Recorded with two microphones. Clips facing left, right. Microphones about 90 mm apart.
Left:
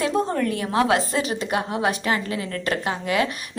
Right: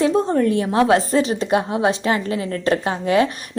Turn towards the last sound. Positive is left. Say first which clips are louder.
# right 5 dB
turn(degrees=-30)  # may be behind; listen again after turning